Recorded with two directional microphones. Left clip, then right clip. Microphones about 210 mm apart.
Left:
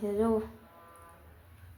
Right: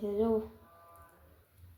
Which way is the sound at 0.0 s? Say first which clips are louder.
Left 2 dB; 5° right (ahead or behind).